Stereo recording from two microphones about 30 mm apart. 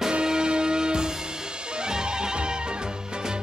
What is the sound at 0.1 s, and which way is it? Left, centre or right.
Music, right.